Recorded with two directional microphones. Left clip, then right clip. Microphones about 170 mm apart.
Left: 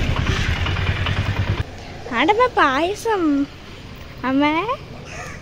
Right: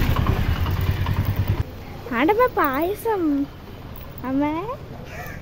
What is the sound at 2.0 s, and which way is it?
A woman's voice, 20° right (ahead or behind).